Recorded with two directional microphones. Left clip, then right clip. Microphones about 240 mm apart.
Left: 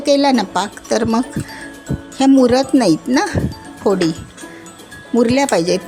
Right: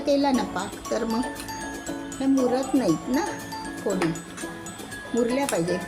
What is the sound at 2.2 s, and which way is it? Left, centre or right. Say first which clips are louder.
A woman's voice: left 12 dB; left.